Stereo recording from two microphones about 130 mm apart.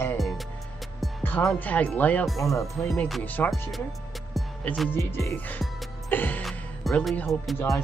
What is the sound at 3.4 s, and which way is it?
Music, 15° left (ahead or behind).